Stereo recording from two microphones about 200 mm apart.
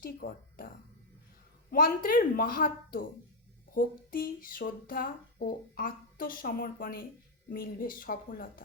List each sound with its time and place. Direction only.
0.0 s speech: 45° left (ahead or behind)
1.7 s speech: 45° left (ahead or behind)